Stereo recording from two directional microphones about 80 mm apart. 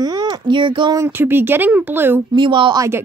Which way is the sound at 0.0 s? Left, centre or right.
Right.